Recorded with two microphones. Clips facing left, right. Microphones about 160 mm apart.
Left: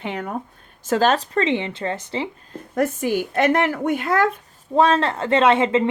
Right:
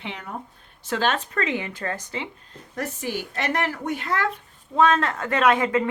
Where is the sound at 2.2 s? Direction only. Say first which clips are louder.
Left 7 dB; 50° left (ahead or behind).